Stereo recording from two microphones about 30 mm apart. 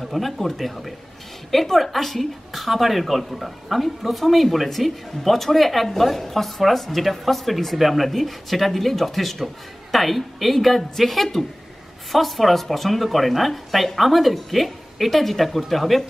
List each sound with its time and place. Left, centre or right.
0.0 s a woman's voice: centre